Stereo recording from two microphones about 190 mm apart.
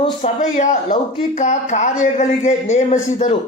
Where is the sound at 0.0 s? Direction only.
40° left (ahead or behind).